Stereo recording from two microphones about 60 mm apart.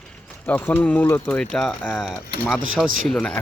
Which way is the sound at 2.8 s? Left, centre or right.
Centre.